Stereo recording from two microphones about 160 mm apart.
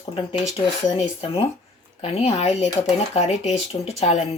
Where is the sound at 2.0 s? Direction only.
40° left (ahead or behind).